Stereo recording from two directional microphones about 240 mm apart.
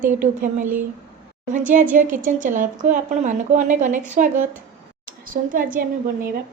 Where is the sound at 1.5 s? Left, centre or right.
Right.